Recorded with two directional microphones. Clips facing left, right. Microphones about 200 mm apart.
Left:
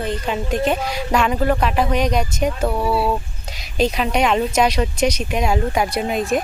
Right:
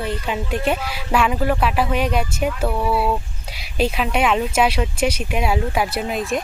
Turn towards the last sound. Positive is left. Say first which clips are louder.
# left 3 dB
turn(degrees=0)  # may be behind; listen again after turning